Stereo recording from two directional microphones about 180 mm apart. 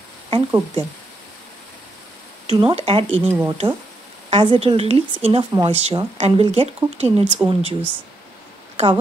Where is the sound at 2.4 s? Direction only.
30° right (ahead or behind).